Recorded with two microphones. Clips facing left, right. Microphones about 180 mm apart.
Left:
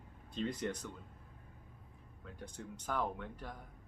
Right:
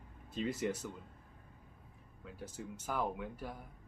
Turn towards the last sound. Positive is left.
turn(degrees=-10)  # may be behind; listen again after turning